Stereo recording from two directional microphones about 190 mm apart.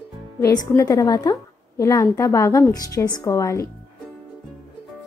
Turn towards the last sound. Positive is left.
turn(degrees=15)  # may be behind; listen again after turning